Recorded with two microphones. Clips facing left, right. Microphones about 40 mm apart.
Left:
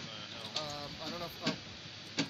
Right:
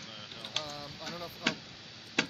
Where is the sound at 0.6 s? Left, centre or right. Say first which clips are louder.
Right 2 dB; right.